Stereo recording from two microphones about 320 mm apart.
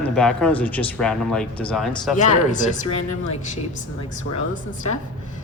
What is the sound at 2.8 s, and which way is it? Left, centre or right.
Speech, left.